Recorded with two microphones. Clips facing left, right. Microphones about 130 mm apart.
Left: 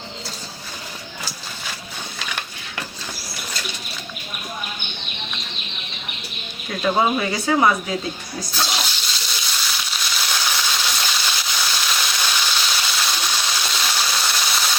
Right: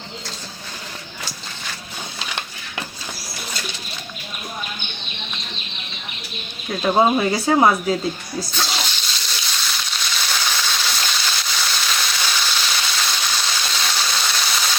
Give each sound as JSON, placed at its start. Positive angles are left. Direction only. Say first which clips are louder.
{"t": 2.1, "sound": "a sound", "louder": "even", "side_deg": -20}
{"t": 7.0, "sound": "speech", "louder": "right 3 dB", "side_deg": -30}
{"t": 8.4, "sound": "water", "louder": "even", "side_deg": 0}